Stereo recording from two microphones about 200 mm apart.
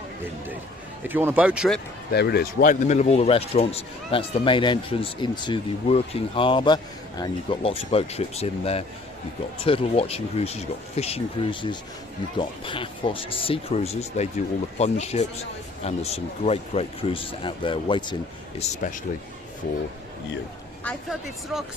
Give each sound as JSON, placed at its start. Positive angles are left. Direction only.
{"t": 1.0, "sound": "speech", "side_deg": -10}
{"t": 2.0, "sound": "speech", "side_deg": 55}
{"t": 18.6, "sound": "speech", "side_deg": 40}
{"t": 20.8, "sound": "speech", "side_deg": 0}